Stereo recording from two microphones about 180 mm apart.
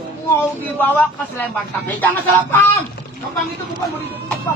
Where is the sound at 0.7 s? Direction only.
10° left (ahead or behind).